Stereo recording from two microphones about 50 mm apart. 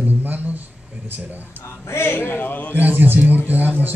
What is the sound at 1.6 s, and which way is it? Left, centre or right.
A man's voice, left.